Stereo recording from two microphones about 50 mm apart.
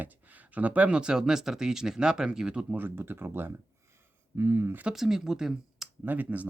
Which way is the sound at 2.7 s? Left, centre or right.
Right.